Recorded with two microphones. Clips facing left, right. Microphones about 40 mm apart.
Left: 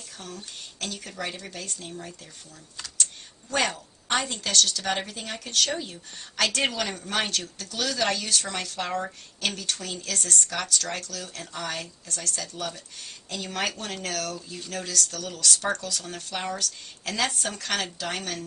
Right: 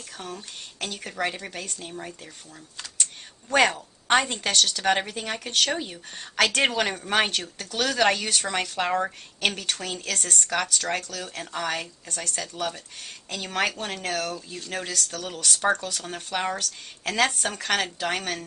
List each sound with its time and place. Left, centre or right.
0.2 s speech: right
3.4 s a woman's voice: right
9.0 s speech: right
11.2 s a woman's voice: centre
13.7 s speech: centre